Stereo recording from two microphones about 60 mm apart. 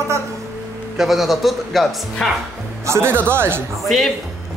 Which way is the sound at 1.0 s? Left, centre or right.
Centre.